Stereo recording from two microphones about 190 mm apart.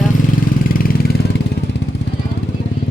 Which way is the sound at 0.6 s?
50° left (ahead or behind).